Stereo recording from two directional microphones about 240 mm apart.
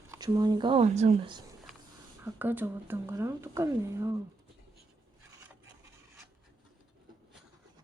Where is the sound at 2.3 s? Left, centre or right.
Centre.